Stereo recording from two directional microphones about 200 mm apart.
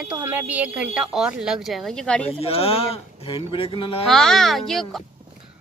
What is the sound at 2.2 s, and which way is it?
Speech, 30° left (ahead or behind).